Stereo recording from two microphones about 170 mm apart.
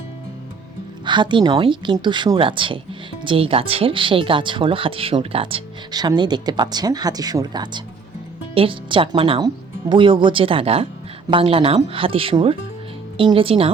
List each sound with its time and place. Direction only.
1.0 s speech: 25° right (ahead or behind)